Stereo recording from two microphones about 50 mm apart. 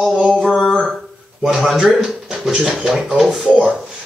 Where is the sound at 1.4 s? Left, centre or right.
Centre.